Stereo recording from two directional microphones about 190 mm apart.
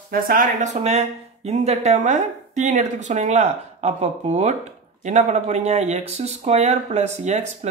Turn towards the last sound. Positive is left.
turn(degrees=-35)  # may be behind; listen again after turning